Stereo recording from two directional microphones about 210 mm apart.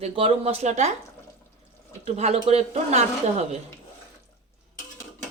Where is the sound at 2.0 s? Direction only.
30° right (ahead or behind).